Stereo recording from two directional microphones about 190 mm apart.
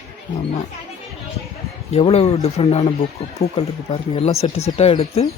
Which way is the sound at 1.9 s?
30° left (ahead or behind).